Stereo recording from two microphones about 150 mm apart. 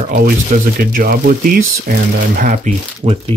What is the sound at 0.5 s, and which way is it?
Speech, 65° right (ahead or behind).